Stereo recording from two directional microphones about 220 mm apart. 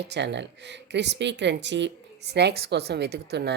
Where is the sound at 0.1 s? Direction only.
50° right (ahead or behind).